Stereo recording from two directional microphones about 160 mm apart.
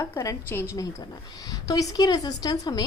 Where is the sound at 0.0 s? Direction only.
20° left (ahead or behind).